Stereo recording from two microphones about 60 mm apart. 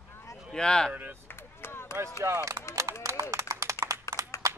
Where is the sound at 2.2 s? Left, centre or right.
Right.